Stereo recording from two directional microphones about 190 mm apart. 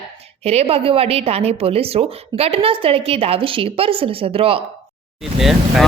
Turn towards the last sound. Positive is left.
turn(degrees=0)  # may be behind; listen again after turning